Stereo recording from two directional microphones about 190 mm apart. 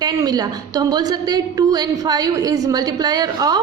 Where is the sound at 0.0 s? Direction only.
20° right (ahead or behind).